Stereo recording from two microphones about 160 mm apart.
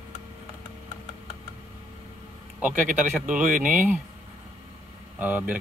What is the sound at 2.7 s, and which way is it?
Speech, 55° right (ahead or behind).